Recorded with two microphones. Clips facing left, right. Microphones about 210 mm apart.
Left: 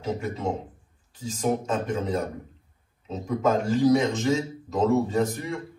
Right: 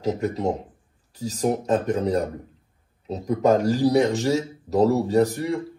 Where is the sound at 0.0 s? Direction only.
40° right (ahead or behind).